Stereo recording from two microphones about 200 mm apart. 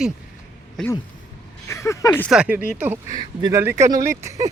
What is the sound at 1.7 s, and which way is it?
Speech, 15° left (ahead or behind).